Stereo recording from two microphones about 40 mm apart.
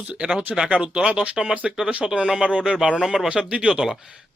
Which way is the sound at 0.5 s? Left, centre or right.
Right.